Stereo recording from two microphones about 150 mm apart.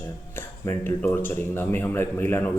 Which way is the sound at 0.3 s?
15° left (ahead or behind).